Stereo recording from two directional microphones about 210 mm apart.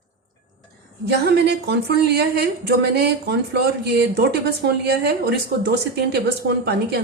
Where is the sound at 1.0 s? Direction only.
50° right (ahead or behind).